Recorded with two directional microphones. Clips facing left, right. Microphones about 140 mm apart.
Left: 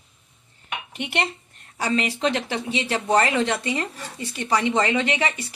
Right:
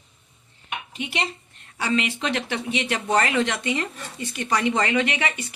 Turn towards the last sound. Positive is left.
turn(degrees=35)  # may be behind; listen again after turning